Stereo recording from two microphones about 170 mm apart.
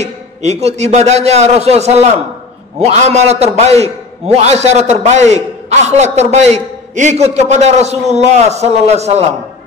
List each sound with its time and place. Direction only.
0.0 s a man's voice: 40° right (ahead or behind)